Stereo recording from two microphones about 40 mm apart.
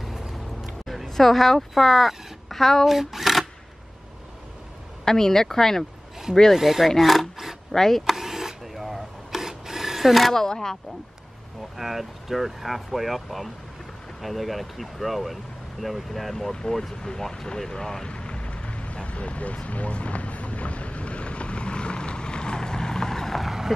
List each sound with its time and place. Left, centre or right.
0.3 s a sound: centre
1.0 s speech: centre
2.9 s speech: centre
5.0 s speech: centre
6.5 s speech: centre
7.7 s speech: centre
8.1 s wood: centre
10.3 s speech: centre
11.7 s speech: centre
17.1 s vehicle: centre
23.4 s a sound: centre